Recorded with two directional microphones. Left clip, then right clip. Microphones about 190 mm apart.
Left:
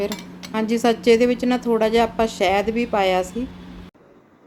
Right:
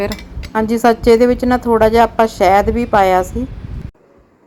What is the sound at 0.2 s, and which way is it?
Speech, 15° right (ahead or behind).